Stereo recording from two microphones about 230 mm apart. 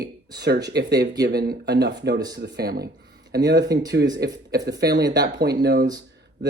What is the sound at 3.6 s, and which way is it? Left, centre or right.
Speech, centre.